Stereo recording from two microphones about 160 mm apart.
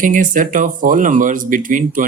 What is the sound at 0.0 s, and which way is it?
Speech, 55° right (ahead or behind).